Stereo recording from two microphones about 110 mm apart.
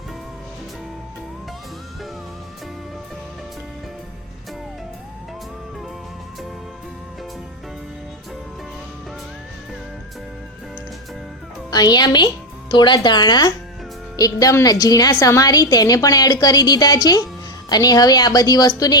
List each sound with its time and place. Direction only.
11.7 s a woman's voice: 35° left (ahead or behind)